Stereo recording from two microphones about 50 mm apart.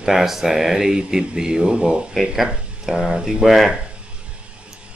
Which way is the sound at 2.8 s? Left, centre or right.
Centre.